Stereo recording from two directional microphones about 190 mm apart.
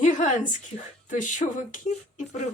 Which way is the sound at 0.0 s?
40° left (ahead or behind).